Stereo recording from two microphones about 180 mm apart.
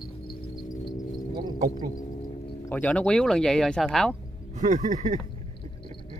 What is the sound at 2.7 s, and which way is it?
Speech, 10° left (ahead or behind).